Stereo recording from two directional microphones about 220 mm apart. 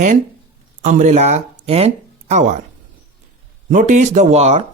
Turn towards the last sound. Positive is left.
turn(degrees=-30)  # may be behind; listen again after turning